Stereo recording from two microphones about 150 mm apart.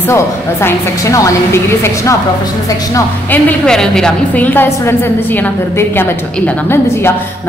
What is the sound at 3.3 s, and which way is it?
A woman's voice, 10° left (ahead or behind).